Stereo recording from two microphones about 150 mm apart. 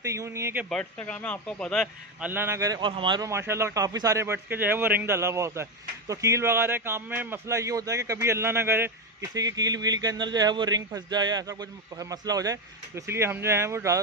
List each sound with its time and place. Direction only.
0.0 s a man's voice: 20° right (ahead or behind)
0.9 s speech: 10° left (ahead or behind)
2.1 s a man's voice: 10° right (ahead or behind); by 3.3 s 30° right (ahead or behind)
3.3 s a man's voice: 15° right (ahead or behind)